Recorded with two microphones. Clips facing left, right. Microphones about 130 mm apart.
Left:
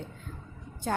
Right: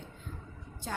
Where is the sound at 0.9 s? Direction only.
55° left (ahead or behind).